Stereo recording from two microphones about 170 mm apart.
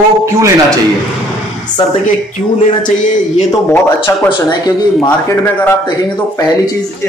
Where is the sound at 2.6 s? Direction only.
50° left (ahead or behind).